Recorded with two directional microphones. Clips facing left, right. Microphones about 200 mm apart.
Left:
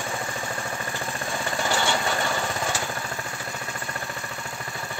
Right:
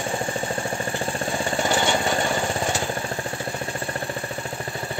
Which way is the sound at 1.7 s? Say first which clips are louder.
Right 2 dB; 20° right (ahead or behind).